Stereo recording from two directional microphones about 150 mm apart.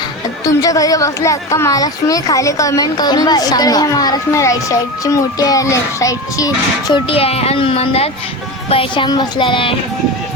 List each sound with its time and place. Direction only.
0.4 s a woman's voice: 25° left (ahead or behind)
6.9 s speech: 40° left (ahead or behind)